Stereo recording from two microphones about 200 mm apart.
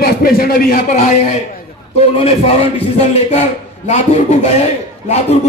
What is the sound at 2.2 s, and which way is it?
A man's voice, 30° left (ahead or behind).